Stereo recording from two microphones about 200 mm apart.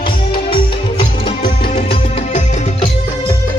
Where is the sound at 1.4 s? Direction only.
45° left (ahead or behind).